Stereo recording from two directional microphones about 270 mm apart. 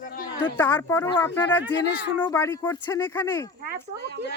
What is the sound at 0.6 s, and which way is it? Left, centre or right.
Speech, centre.